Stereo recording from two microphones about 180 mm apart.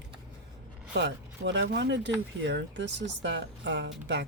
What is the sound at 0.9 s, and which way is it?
Speech, 75° right (ahead or behind).